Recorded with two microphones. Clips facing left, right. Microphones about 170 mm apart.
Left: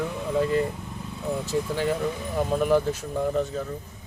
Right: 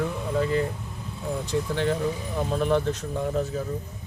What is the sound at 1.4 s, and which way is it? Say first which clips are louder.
Speech: right 1 dB; 5° left (ahead or behind).